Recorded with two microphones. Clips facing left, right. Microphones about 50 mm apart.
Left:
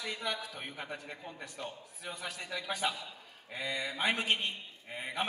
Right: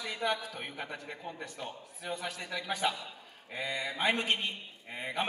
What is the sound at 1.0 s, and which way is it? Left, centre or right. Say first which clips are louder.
A man's voice: right 3 dB; centre.